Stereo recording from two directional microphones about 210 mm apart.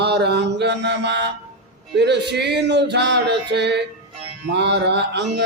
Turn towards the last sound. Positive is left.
turn(degrees=-55)  # may be behind; listen again after turning